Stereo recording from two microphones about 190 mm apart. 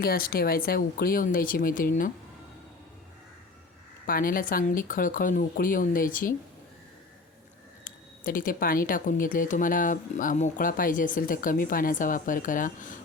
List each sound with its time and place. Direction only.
0.0 s speech: 50° left (ahead or behind)
4.0 s speech: 50° left (ahead or behind)
7.9 s speech: 45° left (ahead or behind)